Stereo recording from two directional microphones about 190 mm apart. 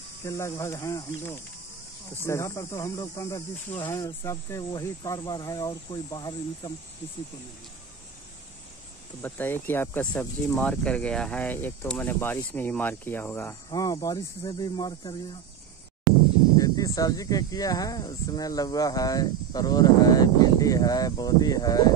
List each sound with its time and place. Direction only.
0.2 s speech: 15° left (ahead or behind)
9.2 s speech: 10° left (ahead or behind)
16.5 s speech: 20° left (ahead or behind)